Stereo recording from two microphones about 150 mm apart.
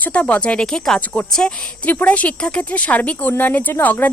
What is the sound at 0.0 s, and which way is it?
A woman's voice, 10° left (ahead or behind).